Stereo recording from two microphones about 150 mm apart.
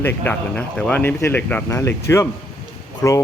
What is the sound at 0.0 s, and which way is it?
Speech, 15° left (ahead or behind).